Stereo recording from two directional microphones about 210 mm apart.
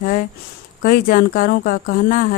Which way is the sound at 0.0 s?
40° left (ahead or behind).